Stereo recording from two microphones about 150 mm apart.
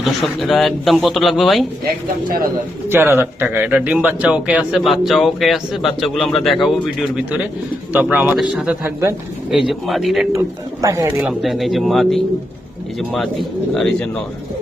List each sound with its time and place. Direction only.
0.0 s a man's voice: centre (ahead or behind)
2.9 s a man's voice: 15° right (ahead or behind)
10.3 s speech: 20° right (ahead or behind)
11.2 s a man's voice: 5° right (ahead or behind)